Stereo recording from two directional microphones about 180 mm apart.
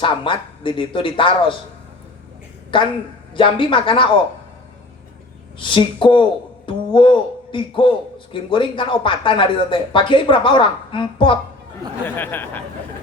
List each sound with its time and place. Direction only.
0.0 s a man's voice: 25° left (ahead or behind)
3.3 s a man's voice: 30° left (ahead or behind)
5.5 s a man's voice: 30° left (ahead or behind)
12.0 s speech: 10° left (ahead or behind)